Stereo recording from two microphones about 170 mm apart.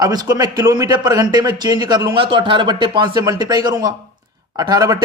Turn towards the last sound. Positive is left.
turn(degrees=-25)  # may be behind; listen again after turning